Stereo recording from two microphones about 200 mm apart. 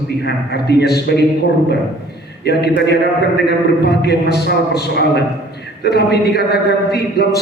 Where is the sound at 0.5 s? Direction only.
55° left (ahead or behind).